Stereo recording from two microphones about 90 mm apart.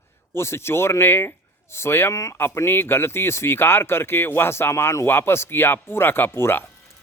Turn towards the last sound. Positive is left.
turn(degrees=25)  # may be behind; listen again after turning